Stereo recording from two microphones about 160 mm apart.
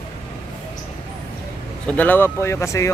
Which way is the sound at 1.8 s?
10° left (ahead or behind).